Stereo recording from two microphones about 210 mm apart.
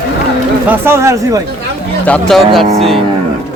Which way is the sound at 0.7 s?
10° right (ahead or behind).